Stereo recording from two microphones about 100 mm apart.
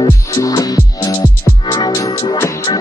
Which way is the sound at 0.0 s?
35° left (ahead or behind).